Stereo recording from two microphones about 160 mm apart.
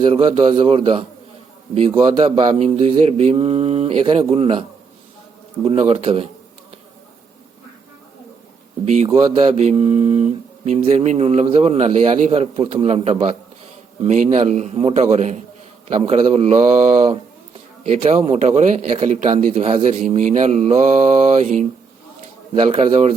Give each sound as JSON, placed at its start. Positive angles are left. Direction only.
{"t": 0.0, "sound": "speech", "side_deg": -35}
{"t": 5.9, "sound": "speech", "side_deg": -40}
{"t": 8.8, "sound": "speech", "side_deg": -45}
{"t": 22.5, "sound": "speech", "side_deg": -30}